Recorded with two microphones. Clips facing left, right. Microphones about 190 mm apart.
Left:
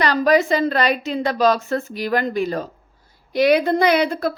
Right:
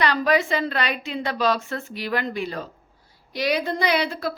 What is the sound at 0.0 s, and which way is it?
A woman's voice, 40° left (ahead or behind).